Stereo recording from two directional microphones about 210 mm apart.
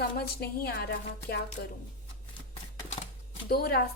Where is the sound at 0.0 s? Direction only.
45° left (ahead or behind).